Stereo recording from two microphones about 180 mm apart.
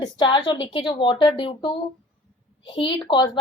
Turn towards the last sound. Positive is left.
turn(degrees=25)  # may be behind; listen again after turning